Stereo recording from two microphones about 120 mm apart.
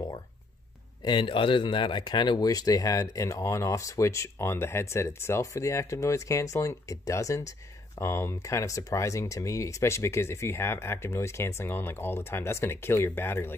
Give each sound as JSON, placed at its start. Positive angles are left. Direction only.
{"t": 1.0, "sound": "speech", "side_deg": 40}